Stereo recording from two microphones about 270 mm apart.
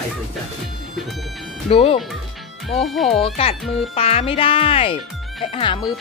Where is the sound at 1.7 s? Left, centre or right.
Left.